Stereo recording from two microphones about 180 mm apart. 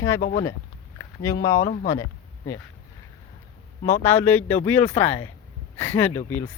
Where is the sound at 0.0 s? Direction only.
15° left (ahead or behind).